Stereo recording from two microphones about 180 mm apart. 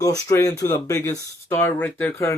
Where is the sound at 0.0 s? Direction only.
15° left (ahead or behind).